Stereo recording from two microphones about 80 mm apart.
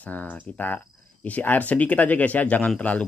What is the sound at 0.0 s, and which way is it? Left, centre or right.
Speech, centre.